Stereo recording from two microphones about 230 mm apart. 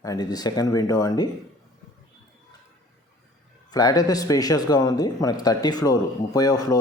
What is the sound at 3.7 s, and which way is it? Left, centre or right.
A man's voice, centre.